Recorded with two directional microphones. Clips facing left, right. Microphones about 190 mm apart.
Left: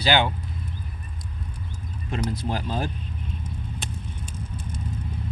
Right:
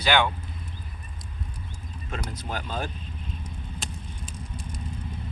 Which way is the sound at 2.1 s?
30° left (ahead or behind).